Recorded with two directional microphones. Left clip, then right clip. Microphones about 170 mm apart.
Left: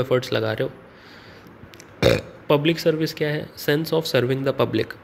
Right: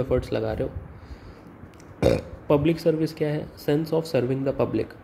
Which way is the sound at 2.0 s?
5° right (ahead or behind).